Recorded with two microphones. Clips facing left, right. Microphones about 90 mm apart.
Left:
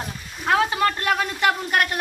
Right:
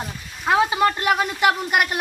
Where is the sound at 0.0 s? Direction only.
10° right (ahead or behind).